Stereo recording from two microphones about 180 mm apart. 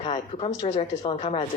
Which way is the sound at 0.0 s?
35° left (ahead or behind).